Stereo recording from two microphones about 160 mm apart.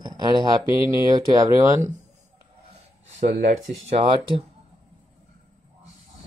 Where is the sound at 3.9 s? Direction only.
35° right (ahead or behind).